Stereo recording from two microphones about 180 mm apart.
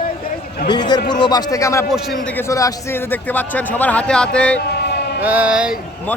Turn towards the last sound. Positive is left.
turn(degrees=-5)  # may be behind; listen again after turning